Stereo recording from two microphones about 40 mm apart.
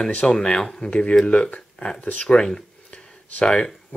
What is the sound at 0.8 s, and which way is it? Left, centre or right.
Speech, left.